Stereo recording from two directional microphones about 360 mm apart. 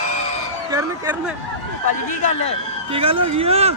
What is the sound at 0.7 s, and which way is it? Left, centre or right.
Speech, centre.